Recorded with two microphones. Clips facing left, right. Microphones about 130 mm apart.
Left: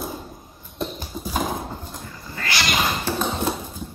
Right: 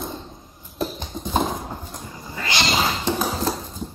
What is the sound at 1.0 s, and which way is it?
Clip-clop, 5° left (ahead or behind).